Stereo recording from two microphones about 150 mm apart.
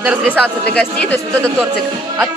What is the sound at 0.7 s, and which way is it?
Speech, 5° left (ahead or behind).